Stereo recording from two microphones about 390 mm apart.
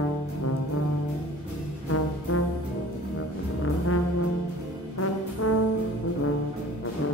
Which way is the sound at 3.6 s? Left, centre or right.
Left.